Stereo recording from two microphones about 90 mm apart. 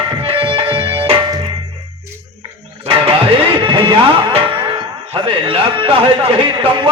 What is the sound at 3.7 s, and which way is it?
Music, 65° right (ahead or behind).